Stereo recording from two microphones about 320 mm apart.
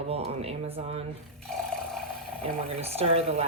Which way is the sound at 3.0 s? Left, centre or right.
Centre.